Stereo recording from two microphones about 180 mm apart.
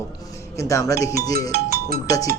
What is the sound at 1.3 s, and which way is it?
Speech, 55° right (ahead or behind).